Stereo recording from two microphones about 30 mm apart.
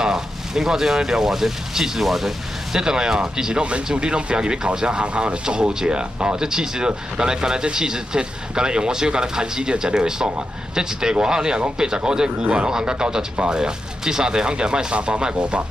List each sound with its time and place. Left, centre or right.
0.0 s speech: centre
2.8 s speech: right
3.6 s speech: right
5.0 s speech: right
5.4 s speech: right
6.4 s speech: right
12.4 s speech: right
12.6 s speech: right